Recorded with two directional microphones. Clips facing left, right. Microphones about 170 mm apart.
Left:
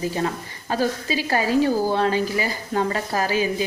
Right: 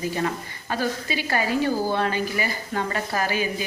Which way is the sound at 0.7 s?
35° left (ahead or behind).